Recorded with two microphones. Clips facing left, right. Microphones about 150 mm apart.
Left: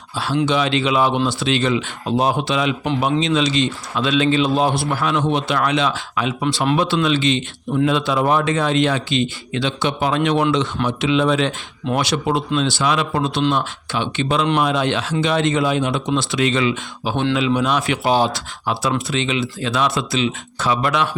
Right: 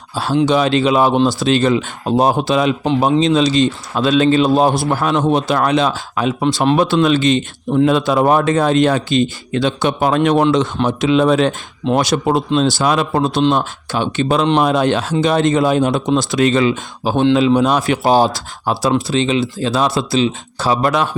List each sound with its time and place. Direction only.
0.4 s speech: 40° right (ahead or behind)